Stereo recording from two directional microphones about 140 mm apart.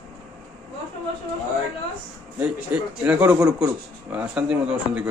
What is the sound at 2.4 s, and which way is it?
A man's voice, 10° right (ahead or behind).